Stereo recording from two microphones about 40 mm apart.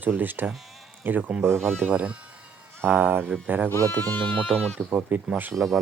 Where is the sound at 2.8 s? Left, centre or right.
Right.